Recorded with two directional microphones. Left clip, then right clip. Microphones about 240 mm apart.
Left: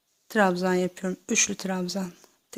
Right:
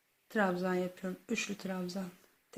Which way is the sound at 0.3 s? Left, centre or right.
Left.